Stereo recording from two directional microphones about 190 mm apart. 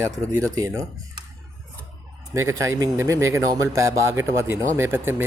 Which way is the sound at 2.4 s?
15° right (ahead or behind).